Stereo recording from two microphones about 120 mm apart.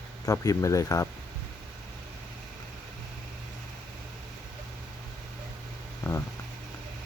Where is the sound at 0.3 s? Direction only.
30° left (ahead or behind).